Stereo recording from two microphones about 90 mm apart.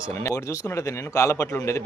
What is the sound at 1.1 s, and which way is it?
Speech, 30° left (ahead or behind).